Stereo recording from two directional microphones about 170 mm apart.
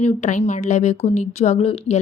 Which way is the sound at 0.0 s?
40° left (ahead or behind).